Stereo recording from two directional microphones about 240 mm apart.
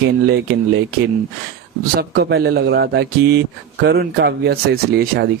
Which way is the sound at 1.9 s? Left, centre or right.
Right.